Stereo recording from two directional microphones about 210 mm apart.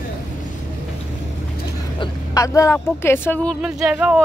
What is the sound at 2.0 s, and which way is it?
Speech, 15° left (ahead or behind).